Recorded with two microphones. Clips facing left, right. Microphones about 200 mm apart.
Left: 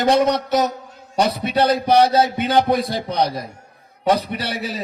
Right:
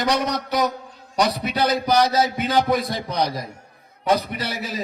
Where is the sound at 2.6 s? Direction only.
60° left (ahead or behind).